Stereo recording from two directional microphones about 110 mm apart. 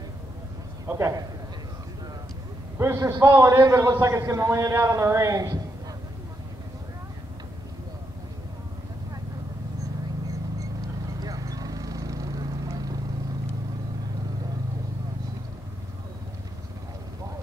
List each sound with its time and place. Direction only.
0.8 s a man's voice: 25° right (ahead or behind)
2.8 s a man's voice: 25° right (ahead or behind)
11.1 s vehicle: 35° right (ahead or behind)